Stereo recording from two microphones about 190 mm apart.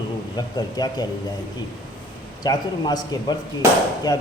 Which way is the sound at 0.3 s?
20° left (ahead or behind).